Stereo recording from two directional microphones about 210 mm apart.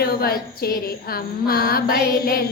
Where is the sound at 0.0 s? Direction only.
45° left (ahead or behind).